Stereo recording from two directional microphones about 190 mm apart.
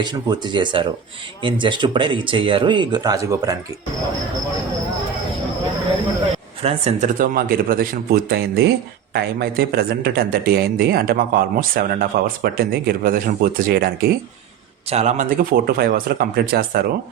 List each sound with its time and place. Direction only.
0.0 s speech: 25° right (ahead or behind)
6.6 s speech: 30° right (ahead or behind)
7.2 s speech: 50° right (ahead or behind)
14.8 s speech: 35° right (ahead or behind); by 16.8 s 50° right (ahead or behind)